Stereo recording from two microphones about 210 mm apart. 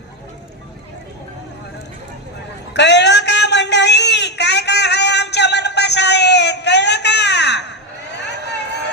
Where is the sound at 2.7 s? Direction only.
55° left (ahead or behind).